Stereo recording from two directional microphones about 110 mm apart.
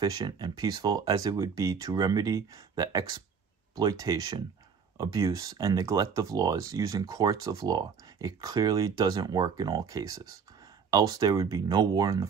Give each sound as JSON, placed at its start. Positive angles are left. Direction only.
{"t": 0.0, "sound": "speech", "side_deg": -35}